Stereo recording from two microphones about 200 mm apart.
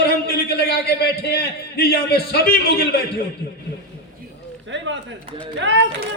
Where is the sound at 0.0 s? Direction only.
50° left (ahead or behind).